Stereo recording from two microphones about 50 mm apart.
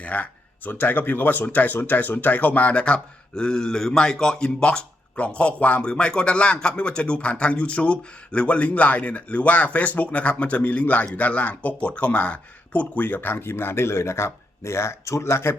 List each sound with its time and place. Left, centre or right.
0.0 s speech: left